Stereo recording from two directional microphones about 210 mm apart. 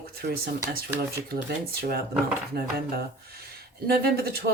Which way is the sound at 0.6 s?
45° right (ahead or behind).